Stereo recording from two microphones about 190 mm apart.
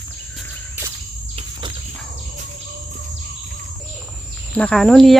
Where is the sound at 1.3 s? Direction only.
30° right (ahead or behind).